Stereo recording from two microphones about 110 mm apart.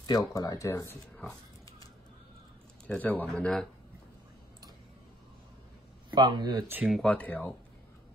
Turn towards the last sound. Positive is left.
turn(degrees=15)  # may be behind; listen again after turning